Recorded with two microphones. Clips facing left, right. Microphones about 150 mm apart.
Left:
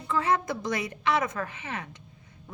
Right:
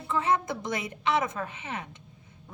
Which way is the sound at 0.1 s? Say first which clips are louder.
Left 1 dB; 20° right (ahead or behind).